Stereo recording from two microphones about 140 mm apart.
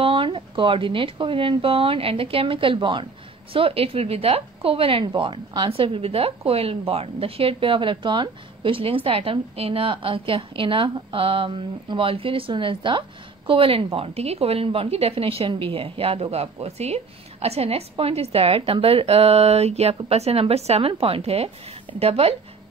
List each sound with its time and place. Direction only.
0.0 s a woman's voice: 40° right (ahead or behind)